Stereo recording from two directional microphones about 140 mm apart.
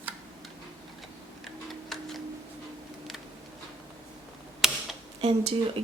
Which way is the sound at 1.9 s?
Centre (ahead or behind).